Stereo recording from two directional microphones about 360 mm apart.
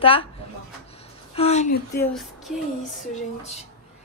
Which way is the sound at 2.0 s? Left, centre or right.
Centre.